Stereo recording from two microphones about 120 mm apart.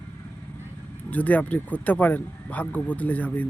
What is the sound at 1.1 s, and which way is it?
Speech, 15° left (ahead or behind).